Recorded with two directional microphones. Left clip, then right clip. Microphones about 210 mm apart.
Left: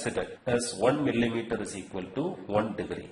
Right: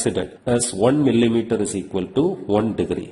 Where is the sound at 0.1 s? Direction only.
25° right (ahead or behind).